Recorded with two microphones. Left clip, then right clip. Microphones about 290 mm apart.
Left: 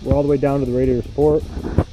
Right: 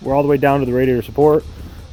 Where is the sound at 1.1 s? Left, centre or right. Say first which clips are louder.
Right 4 dB; right.